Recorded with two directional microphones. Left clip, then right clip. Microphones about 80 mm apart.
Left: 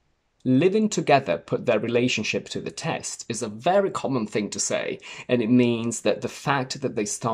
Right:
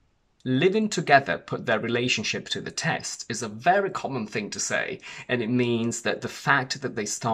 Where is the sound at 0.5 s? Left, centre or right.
Left.